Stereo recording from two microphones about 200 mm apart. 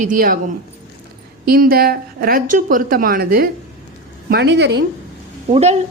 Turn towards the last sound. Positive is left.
turn(degrees=-35)  # may be behind; listen again after turning